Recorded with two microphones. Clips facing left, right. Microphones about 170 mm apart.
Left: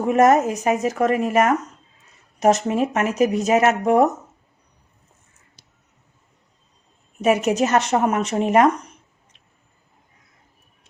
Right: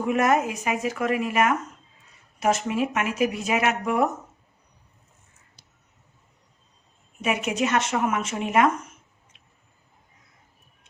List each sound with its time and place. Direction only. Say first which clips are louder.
0.0 s speech: left 6 dB; 40° left (ahead or behind)
5.6 s crow: left 2 dB; 90° left
7.2 s speech: left 7 dB; 40° left (ahead or behind)